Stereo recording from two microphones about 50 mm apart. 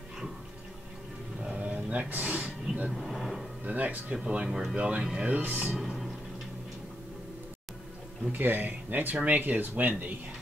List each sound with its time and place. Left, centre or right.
1.6 s a sound: right
2.4 s vehicle: centre
2.9 s vehicle: centre
3.6 s speech: right
4.2 s speech: centre
4.7 s speech: right
5.8 s music: centre
8.3 s speech: right
9.1 s speech: right
9.4 s speech: right